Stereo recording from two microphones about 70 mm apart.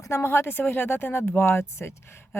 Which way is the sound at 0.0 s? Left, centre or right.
Left.